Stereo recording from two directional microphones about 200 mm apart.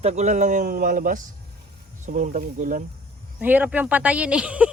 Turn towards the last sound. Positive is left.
turn(degrees=-5)  # may be behind; listen again after turning